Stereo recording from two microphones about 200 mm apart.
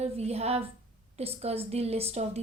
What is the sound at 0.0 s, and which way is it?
A woman's voice, 30° right (ahead or behind).